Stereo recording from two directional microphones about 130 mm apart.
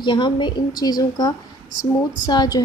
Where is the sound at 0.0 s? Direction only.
35° left (ahead or behind).